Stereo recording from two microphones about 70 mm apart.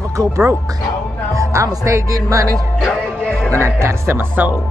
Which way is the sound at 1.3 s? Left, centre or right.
Right.